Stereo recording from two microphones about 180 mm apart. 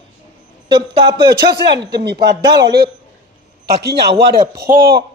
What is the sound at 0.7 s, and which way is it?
Speech, 25° right (ahead or behind).